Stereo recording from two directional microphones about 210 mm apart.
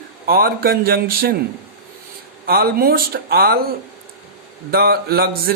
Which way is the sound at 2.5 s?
45° right (ahead or behind).